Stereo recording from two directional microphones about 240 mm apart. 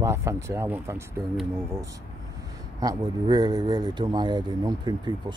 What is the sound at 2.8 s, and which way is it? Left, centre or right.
Speech, centre.